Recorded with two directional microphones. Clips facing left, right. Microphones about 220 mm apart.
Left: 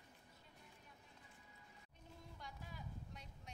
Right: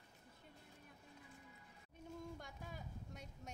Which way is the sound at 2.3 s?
50° right (ahead or behind).